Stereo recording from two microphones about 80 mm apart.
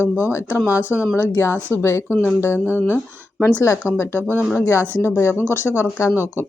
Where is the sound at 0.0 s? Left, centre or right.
Left.